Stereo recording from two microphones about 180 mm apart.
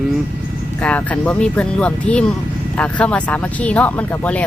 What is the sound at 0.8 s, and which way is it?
Speech, 5° left (ahead or behind).